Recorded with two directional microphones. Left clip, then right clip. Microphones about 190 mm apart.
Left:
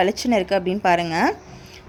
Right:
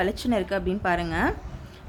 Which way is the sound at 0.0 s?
20° left (ahead or behind).